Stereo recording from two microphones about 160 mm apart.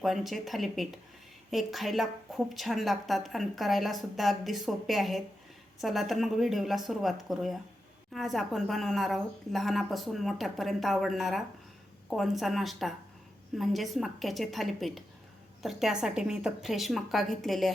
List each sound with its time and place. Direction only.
0.0 s a woman's voice: centre (ahead or behind)